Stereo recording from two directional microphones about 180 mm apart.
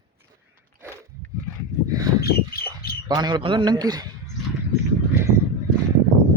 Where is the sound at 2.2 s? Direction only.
55° left (ahead or behind).